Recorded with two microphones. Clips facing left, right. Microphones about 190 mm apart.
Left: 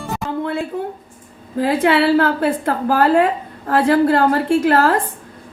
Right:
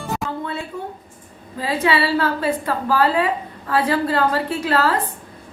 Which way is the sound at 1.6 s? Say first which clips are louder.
Left 5 dB; 55° left (ahead or behind).